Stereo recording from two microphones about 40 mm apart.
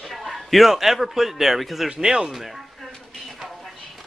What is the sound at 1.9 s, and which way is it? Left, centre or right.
Speech, centre.